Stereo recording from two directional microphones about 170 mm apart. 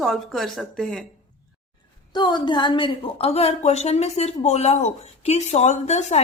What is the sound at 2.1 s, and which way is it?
A woman's voice, 25° left (ahead or behind).